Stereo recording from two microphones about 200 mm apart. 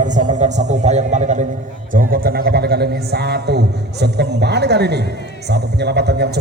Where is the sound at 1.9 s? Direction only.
45° right (ahead or behind).